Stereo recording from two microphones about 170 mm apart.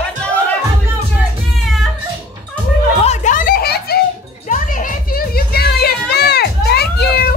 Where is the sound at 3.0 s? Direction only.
45° left (ahead or behind); by 4.0 s 65° left (ahead or behind).